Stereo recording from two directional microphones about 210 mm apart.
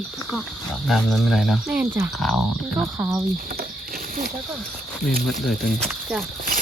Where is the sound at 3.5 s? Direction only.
45° right (ahead or behind).